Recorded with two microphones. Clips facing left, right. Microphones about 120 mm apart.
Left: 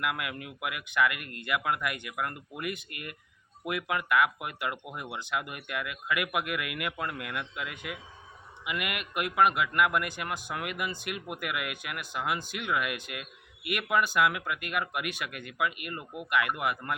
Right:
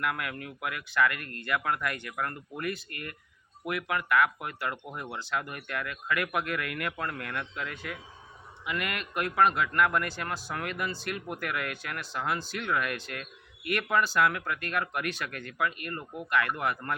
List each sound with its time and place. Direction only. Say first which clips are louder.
0.0 s a man's voice: even; 15° left (ahead or behind)